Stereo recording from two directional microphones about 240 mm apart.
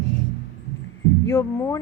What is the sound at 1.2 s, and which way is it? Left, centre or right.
Speech, centre.